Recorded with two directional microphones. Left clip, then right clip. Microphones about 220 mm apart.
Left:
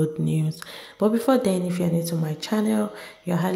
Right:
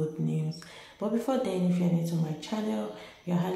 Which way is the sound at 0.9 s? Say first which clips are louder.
Left 9 dB; 30° left (ahead or behind).